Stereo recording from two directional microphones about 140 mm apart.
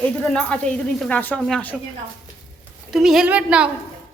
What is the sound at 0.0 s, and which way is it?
A woman's voice, 5° left (ahead or behind).